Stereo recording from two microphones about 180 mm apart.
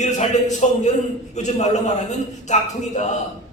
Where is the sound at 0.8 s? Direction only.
40° left (ahead or behind).